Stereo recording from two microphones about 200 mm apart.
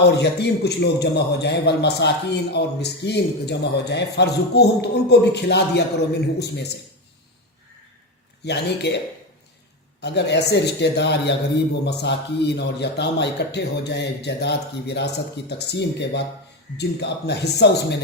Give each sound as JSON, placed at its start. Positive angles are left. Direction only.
{"t": 0.0, "sound": "a man's voice", "side_deg": 55}
{"t": 8.4, "sound": "a man's voice", "side_deg": 60}
{"t": 10.0, "sound": "a man's voice", "side_deg": 55}